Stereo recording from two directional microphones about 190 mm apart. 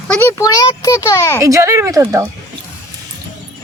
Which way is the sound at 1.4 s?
15° right (ahead or behind).